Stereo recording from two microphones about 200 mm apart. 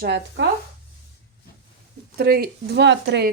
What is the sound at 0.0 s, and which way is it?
Speech, 60° right (ahead or behind).